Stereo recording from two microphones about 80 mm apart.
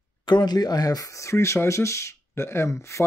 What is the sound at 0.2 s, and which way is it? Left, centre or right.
Speech, left.